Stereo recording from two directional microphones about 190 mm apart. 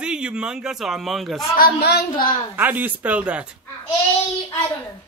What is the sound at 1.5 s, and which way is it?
Speech, 55° left (ahead or behind).